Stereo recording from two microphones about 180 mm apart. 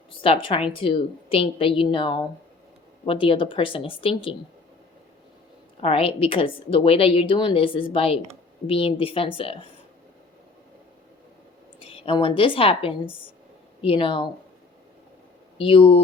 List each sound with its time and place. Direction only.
0.1 s a woman's voice: 30° left (ahead or behind)
5.8 s a woman's voice: 30° left (ahead or behind)
11.8 s a woman's voice: 30° left (ahead or behind)
15.5 s a woman's voice: 30° left (ahead or behind)